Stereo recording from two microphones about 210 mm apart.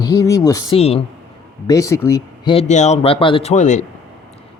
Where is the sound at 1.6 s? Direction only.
15° left (ahead or behind).